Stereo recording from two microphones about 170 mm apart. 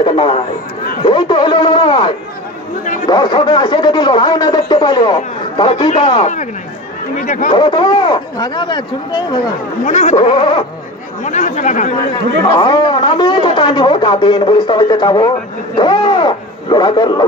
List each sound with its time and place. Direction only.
0.0 s a man's voice: 30° left (ahead or behind)
6.2 s speech: 45° left (ahead or behind)
7.5 s a man's voice: 25° left (ahead or behind)
9.8 s speech: 45° left (ahead or behind)
11.2 s speech: 45° left (ahead or behind)
12.4 s a man's voice: 25° left (ahead or behind)